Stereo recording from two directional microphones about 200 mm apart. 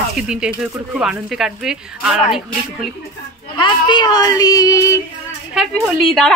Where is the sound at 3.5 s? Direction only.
25° left (ahead or behind).